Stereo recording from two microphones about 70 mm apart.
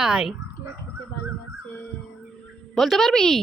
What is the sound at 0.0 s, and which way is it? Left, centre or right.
Speech, centre.